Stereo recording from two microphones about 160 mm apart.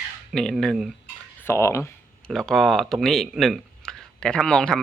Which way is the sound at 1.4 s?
15° left (ahead or behind).